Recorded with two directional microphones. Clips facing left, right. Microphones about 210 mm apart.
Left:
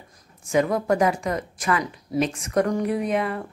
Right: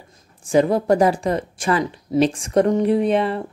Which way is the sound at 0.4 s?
30° right (ahead or behind).